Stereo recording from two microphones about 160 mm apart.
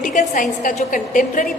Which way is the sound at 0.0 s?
55° left (ahead or behind).